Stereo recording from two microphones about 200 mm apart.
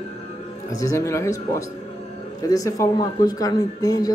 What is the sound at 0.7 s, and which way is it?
Speech, 15° left (ahead or behind).